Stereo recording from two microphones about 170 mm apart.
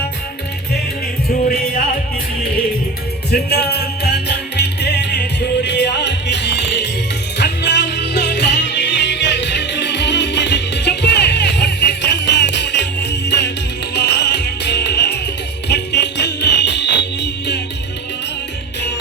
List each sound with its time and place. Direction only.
3.3 s music: 70° left (ahead or behind); by 13.5 s 90° left
13.9 s music: 70° left (ahead or behind); by 17.6 s 90° left